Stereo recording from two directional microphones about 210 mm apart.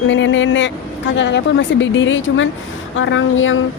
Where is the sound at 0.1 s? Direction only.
65° left (ahead or behind).